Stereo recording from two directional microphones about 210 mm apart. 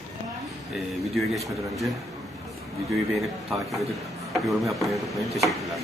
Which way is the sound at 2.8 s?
Centre (ahead or behind).